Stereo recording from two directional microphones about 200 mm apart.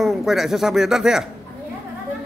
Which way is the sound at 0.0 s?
Centre (ahead or behind).